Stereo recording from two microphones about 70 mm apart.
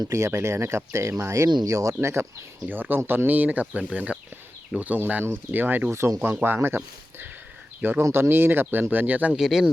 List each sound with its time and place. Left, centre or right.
0.0 s speech: right
2.6 s speech: right
5.9 s speech: right
9.3 s speech: centre